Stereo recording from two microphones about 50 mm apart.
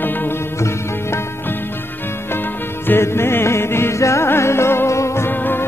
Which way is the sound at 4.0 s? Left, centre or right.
Left.